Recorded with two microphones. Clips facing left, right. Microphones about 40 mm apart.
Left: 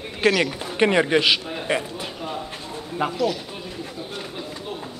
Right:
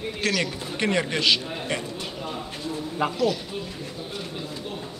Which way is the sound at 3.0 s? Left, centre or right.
Centre.